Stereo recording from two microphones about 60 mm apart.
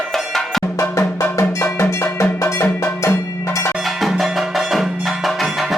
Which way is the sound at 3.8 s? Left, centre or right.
Centre.